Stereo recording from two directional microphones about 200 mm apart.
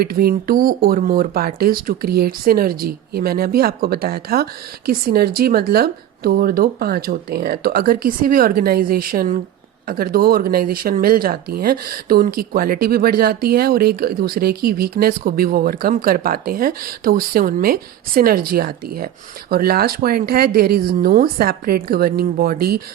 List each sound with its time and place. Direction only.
0.0 s speech: 50° right (ahead or behind)